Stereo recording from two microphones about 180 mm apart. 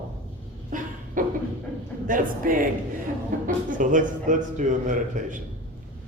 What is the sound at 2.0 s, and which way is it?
Speech, 50° right (ahead or behind).